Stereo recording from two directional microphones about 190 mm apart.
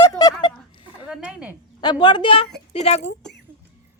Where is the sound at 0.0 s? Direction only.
20° left (ahead or behind).